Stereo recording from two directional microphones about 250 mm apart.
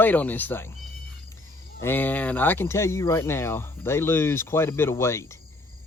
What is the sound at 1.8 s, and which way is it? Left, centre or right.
Speech, centre.